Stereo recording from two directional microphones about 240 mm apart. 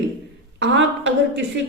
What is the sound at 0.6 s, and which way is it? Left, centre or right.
Speech, right.